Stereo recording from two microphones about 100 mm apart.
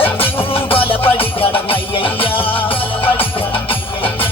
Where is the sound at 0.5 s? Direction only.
65° left (ahead or behind).